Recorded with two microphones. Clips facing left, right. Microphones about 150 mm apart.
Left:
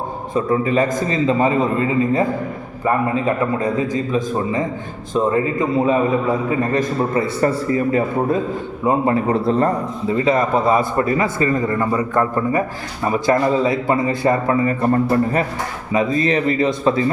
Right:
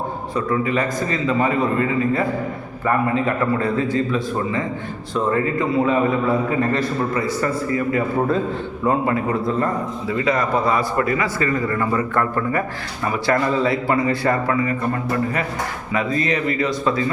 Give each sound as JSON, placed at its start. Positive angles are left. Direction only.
{"t": 0.3, "sound": "a man's voice", "side_deg": 25}
{"t": 15.9, "sound": "a man's voice", "side_deg": 25}